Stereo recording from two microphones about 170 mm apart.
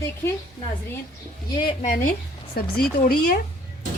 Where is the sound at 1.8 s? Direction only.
55° left (ahead or behind).